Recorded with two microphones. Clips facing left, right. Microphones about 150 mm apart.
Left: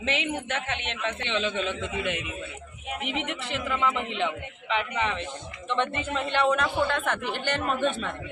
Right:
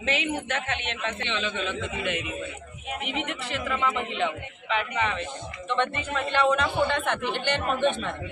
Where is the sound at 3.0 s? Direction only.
25° left (ahead or behind).